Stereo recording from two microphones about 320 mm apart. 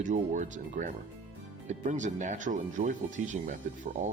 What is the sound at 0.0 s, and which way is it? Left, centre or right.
Speech, right.